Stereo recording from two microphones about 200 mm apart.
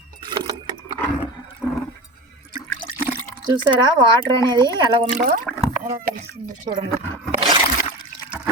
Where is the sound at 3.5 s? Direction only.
25° right (ahead or behind).